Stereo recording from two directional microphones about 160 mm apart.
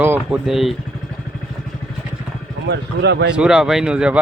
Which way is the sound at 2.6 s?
90° right.